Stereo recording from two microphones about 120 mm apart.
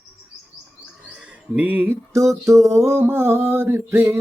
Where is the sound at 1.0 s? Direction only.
10° right (ahead or behind).